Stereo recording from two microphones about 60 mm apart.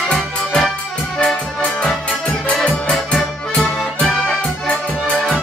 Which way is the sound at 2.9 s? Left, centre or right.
Centre.